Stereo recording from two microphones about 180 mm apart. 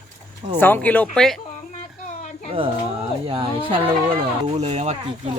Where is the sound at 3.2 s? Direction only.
30° right (ahead or behind).